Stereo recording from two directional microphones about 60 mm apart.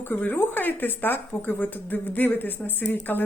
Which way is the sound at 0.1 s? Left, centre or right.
Left.